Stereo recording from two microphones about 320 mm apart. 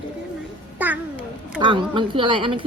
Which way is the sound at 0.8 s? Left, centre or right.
Centre.